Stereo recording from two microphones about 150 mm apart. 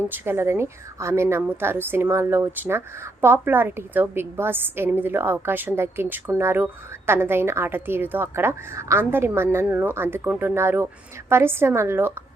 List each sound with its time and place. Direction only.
0.1 s a woman's voice: 15° right (ahead or behind)